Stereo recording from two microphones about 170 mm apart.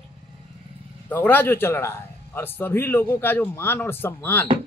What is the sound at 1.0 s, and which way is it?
A man's voice, 10° left (ahead or behind).